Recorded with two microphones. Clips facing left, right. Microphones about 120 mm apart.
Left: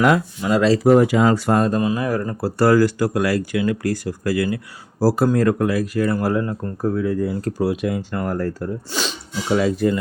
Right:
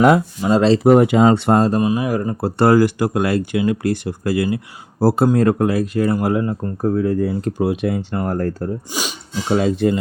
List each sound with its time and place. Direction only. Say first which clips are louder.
0.0 s speech: right 4 dB; 25° right (ahead or behind)
7.0 s speech: right 3 dB; 30° right (ahead or behind)
7.4 s speech: right 2 dB; 20° right (ahead or behind)
8.4 s speech: right 2 dB; 45° right (ahead or behind)
8.9 s speech: even; 10° right (ahead or behind)
9.5 s speech: right 2 dB; 25° right (ahead or behind)